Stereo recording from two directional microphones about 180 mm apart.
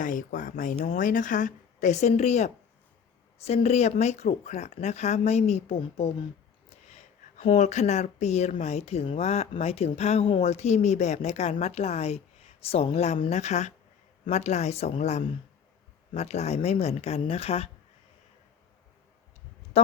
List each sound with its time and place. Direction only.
0.0 s speech: 45° left (ahead or behind)
19.7 s a woman's voice: 35° left (ahead or behind)